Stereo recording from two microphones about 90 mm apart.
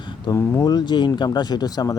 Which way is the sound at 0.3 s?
50° left (ahead or behind).